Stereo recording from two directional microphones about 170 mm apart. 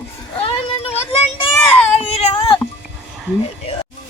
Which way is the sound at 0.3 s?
35° left (ahead or behind).